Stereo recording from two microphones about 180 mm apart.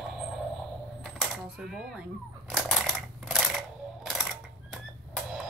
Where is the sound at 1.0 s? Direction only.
Centre (ahead or behind).